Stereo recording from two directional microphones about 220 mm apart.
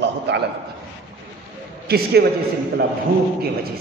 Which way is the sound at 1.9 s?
45° right (ahead or behind).